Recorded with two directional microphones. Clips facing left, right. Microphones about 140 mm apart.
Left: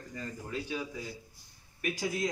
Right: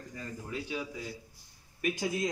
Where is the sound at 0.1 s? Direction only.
10° right (ahead or behind).